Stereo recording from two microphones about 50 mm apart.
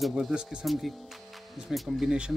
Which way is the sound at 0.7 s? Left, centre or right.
Centre.